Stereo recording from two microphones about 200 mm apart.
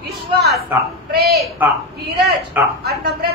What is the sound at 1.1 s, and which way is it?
Speech, 50° right (ahead or behind).